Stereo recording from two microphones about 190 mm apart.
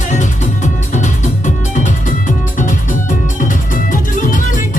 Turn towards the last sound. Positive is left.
turn(degrees=45)  # may be behind; listen again after turning